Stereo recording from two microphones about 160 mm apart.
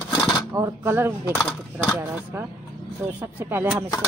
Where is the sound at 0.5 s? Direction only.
20° right (ahead or behind).